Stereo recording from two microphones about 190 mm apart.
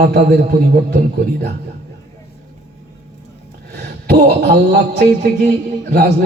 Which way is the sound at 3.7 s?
60° right (ahead or behind).